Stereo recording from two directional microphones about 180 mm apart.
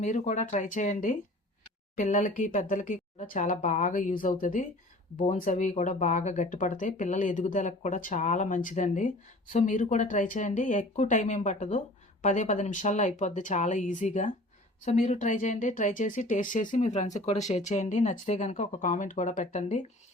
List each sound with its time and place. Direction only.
0.0 s speech: 40° left (ahead or behind)